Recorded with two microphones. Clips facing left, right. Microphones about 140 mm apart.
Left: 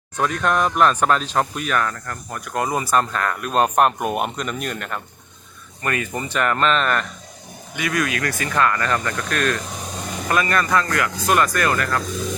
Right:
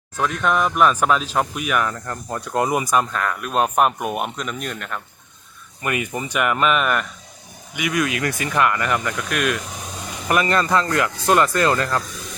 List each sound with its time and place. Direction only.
0.2 s speech: centre (ahead or behind)
5.8 s speech: 15° right (ahead or behind)
10.2 s speech: 20° right (ahead or behind)